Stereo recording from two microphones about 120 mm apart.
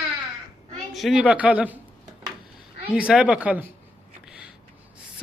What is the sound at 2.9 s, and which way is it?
Speech, 5° right (ahead or behind).